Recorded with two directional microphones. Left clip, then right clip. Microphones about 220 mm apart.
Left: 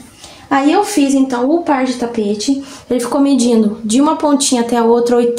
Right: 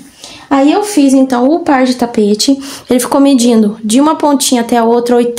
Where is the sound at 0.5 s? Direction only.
50° right (ahead or behind).